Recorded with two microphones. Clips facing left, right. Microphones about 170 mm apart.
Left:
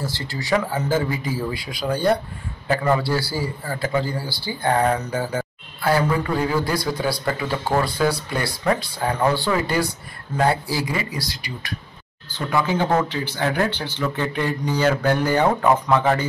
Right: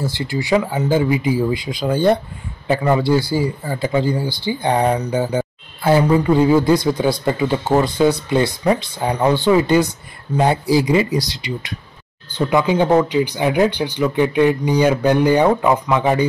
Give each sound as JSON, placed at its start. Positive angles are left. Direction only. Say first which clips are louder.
{"t": 0.0, "sound": "a man's voice", "louder": "right 7 dB", "side_deg": -15}